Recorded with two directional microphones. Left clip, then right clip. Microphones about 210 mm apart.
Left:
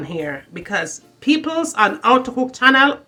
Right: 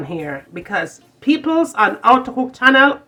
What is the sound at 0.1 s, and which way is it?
Speech, 10° left (ahead or behind).